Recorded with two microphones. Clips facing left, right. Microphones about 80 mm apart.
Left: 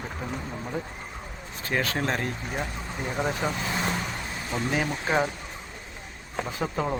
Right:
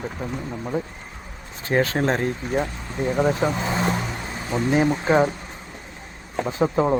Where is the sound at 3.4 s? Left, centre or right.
Right.